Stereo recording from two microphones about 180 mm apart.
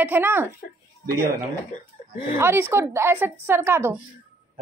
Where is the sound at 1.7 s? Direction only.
40° left (ahead or behind).